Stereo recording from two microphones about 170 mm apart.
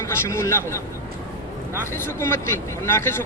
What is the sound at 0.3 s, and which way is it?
Speech, 15° left (ahead or behind).